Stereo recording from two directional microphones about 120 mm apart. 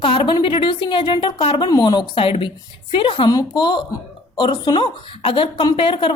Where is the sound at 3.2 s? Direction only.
35° left (ahead or behind).